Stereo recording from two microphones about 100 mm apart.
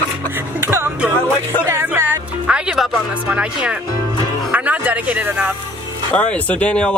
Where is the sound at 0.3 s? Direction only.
20° right (ahead or behind).